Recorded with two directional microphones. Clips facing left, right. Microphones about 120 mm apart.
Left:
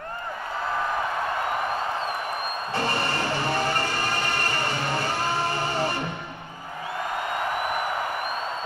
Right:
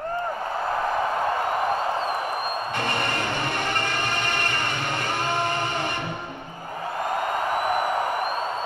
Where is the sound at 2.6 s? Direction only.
35° left (ahead or behind).